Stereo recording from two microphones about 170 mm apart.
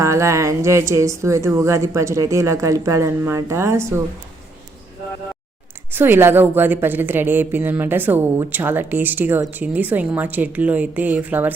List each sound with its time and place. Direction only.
0.0 s a woman's voice: 15° right (ahead or behind)
5.9 s a woman's voice: 10° right (ahead or behind)